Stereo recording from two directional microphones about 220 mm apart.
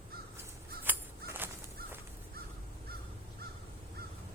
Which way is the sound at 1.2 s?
10° right (ahead or behind).